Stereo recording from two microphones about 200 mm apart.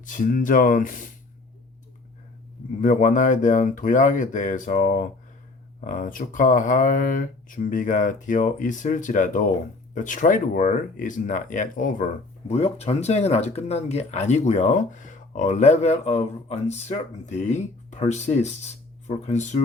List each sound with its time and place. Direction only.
0.0 s speech: 40° left (ahead or behind)
2.8 s speech: 40° left (ahead or behind)